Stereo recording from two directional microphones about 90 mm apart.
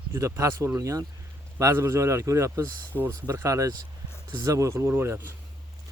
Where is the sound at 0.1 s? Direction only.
30° right (ahead or behind).